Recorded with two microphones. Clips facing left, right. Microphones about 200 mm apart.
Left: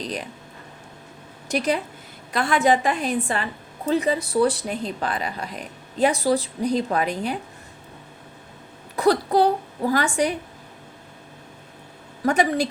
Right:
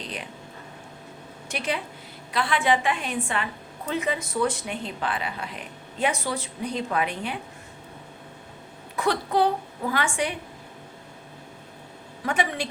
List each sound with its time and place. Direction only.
0.0 s speech: 40° left (ahead or behind)
1.5 s a woman's voice: 40° left (ahead or behind)
9.0 s a woman's voice: 35° left (ahead or behind)
12.2 s a woman's voice: 40° left (ahead or behind)